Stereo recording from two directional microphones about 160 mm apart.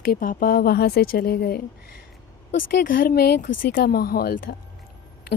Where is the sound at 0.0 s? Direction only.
65° left (ahead or behind).